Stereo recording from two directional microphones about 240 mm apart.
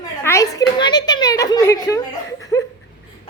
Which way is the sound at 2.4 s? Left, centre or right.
Centre.